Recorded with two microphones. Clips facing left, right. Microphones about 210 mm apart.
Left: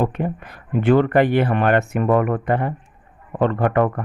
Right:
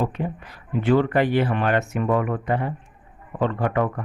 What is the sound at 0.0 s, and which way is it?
Speech, 55° left (ahead or behind).